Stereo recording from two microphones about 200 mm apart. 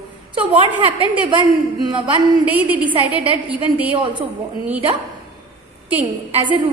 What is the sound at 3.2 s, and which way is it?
Speech, 5° right (ahead or behind).